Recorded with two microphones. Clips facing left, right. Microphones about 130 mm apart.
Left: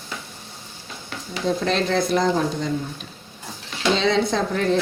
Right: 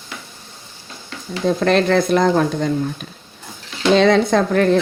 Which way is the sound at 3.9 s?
55° right (ahead or behind).